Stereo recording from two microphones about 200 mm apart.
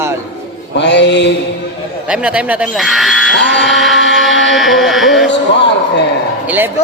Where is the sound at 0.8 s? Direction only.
60° left (ahead or behind).